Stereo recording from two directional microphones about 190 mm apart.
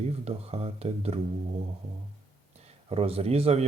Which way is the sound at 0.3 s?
30° right (ahead or behind).